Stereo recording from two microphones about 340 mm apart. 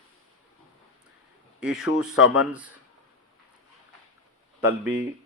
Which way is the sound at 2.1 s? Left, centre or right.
Left.